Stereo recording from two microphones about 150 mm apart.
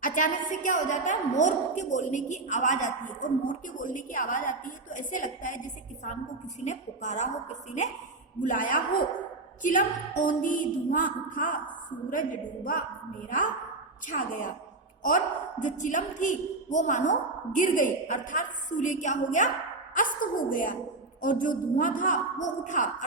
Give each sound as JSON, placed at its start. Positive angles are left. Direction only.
{"t": 0.0, "sound": "a woman's voice", "side_deg": 60}
{"t": 8.4, "sound": "a woman's voice", "side_deg": 60}
{"t": 14.1, "sound": "a woman's voice", "side_deg": 60}
{"t": 15.6, "sound": "a woman's voice", "side_deg": 55}